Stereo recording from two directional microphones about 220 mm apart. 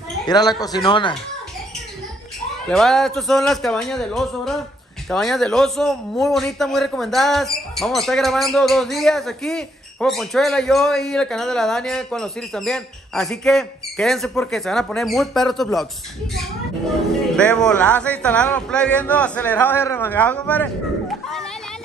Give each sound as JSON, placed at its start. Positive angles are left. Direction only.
{"t": 0.3, "sound": "speech", "side_deg": 20}
{"t": 2.7, "sound": "a man's voice", "side_deg": 0}
{"t": 17.4, "sound": "a man's voice", "side_deg": 5}